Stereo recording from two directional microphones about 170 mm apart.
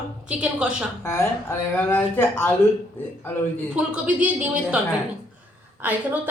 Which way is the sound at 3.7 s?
10° right (ahead or behind).